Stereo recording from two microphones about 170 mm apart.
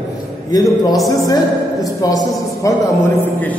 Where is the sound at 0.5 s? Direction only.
20° left (ahead or behind).